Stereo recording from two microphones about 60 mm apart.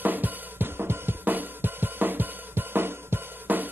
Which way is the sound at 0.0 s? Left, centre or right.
Right.